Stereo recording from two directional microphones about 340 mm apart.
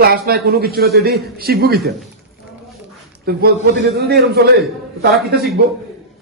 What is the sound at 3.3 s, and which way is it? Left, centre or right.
Speech, right.